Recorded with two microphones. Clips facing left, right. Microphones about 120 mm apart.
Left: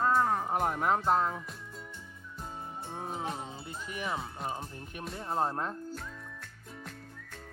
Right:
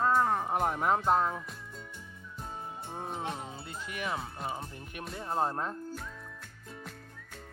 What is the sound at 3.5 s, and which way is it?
Speech, 25° left (ahead or behind).